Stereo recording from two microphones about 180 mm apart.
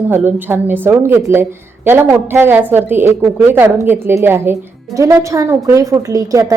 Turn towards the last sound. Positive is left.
turn(degrees=-15)  # may be behind; listen again after turning